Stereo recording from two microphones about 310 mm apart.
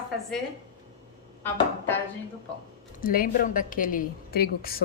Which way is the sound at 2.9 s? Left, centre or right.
Left.